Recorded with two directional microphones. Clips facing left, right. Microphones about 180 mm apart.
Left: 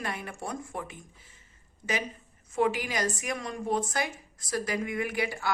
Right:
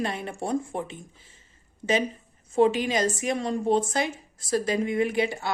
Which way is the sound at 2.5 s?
25° right (ahead or behind).